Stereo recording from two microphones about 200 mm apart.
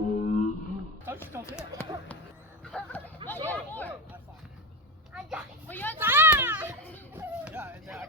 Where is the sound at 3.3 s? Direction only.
10° left (ahead or behind).